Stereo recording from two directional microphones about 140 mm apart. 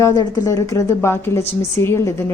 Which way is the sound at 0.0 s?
25° left (ahead or behind).